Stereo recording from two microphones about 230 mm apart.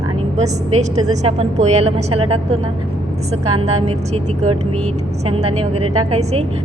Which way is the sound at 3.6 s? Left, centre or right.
Right.